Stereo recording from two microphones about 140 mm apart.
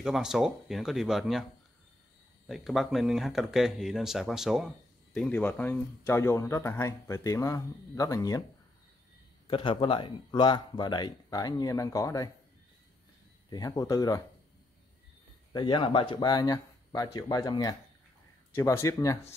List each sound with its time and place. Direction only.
0.0 s speech: 5° right (ahead or behind)
2.4 s speech: centre (ahead or behind); by 8.4 s 25° left (ahead or behind)
9.5 s speech: 40° left (ahead or behind)
13.5 s speech: 25° left (ahead or behind)
15.5 s speech: 35° left (ahead or behind)